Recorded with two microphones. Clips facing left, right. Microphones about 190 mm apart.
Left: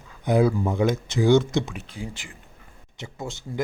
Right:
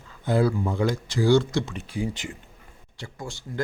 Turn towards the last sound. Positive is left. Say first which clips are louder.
# left 2 dB
turn(degrees=20)  # may be behind; listen again after turning